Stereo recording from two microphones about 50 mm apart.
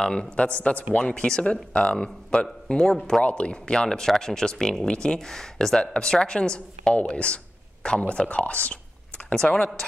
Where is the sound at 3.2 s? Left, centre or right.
Left.